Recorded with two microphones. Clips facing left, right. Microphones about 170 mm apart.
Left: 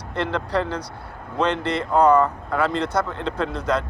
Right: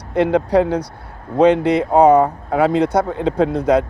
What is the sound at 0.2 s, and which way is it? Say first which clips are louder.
Speech: right 9 dB; 60° right (ahead or behind).